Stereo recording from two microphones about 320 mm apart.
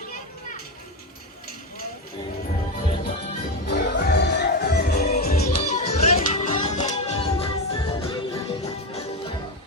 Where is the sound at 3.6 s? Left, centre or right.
Left.